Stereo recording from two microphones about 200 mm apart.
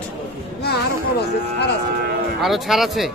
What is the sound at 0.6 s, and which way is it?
Speech, 55° left (ahead or behind).